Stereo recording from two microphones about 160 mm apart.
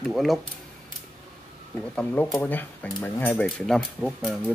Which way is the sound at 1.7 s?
10° left (ahead or behind).